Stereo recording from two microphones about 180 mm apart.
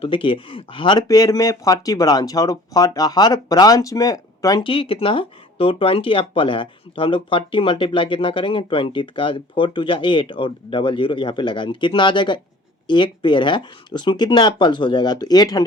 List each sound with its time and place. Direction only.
0.0 s speech: 30° left (ahead or behind)